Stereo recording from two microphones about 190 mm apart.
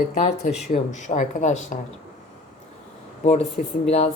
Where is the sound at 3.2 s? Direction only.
35° left (ahead or behind).